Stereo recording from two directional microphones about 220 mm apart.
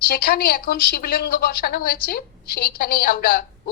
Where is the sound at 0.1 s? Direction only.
45° left (ahead or behind).